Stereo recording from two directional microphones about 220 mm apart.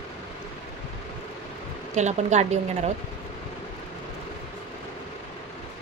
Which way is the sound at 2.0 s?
30° right (ahead or behind).